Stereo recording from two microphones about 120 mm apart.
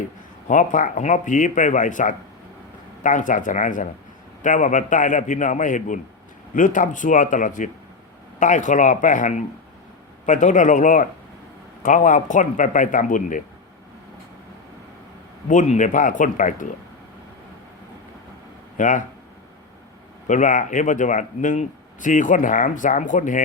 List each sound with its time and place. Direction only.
0.4 s speech: 90° left
15.4 s speech: 90° left
18.8 s speech: 90° left
20.2 s speech: 90° left